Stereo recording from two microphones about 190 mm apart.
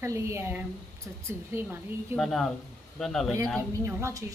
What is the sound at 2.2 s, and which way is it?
Speech, centre (ahead or behind).